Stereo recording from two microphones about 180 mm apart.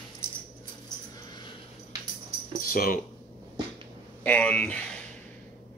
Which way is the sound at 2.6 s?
55° left (ahead or behind).